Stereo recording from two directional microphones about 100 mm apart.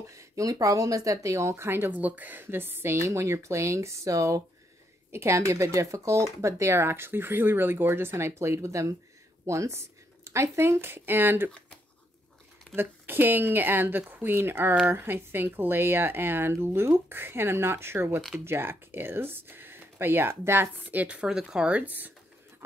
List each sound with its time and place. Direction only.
0.1 s speech: 35° right (ahead or behind)
12.7 s speech: 20° right (ahead or behind)